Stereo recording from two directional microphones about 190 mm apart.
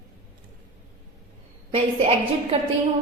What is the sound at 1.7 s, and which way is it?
Speech, 30° right (ahead or behind).